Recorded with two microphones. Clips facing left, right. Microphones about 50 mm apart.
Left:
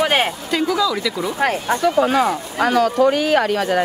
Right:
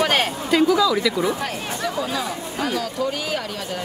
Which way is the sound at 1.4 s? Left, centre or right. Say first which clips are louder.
Left 8 dB; left.